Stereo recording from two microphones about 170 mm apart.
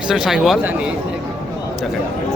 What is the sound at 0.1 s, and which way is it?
Speech, 5° right (ahead or behind).